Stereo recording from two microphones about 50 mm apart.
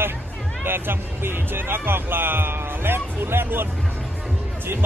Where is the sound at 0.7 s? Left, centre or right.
Right.